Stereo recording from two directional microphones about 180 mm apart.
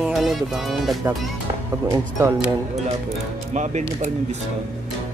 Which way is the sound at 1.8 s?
20° right (ahead or behind).